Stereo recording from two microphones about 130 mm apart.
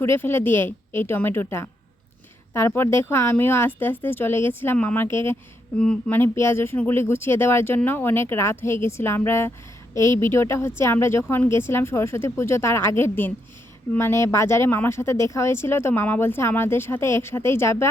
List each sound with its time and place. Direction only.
0.0 s a woman's voice: 20° left (ahead or behind)
5.7 s speech: 5° left (ahead or behind)